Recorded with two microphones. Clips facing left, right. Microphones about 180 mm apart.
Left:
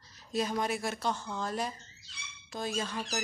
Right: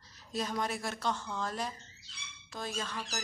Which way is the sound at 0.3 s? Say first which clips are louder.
Left 3 dB; 5° left (ahead or behind).